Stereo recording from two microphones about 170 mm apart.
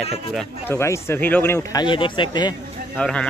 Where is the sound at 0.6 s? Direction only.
15° left (ahead or behind).